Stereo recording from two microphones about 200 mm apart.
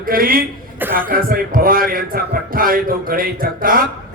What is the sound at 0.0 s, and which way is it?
Speech, 45° right (ahead or behind).